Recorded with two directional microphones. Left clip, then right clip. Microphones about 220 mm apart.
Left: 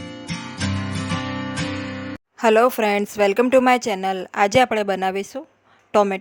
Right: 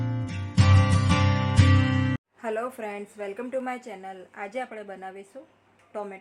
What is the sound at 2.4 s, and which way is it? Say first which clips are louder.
A woman's voice: left 16 dB; 50° left (ahead or behind).